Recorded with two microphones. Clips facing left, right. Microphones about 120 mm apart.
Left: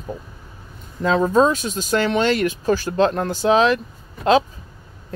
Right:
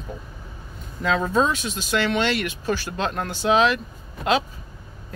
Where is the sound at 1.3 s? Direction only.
40° left (ahead or behind).